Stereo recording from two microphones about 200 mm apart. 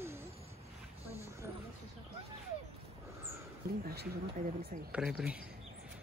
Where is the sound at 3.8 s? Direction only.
50° right (ahead or behind).